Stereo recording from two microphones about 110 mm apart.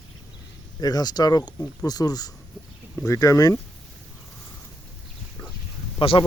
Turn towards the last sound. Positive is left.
turn(degrees=50)  # may be behind; listen again after turning